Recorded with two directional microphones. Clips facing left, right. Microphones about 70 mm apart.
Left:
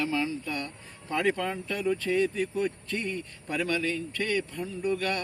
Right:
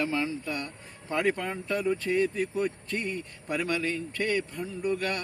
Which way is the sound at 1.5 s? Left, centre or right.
Centre.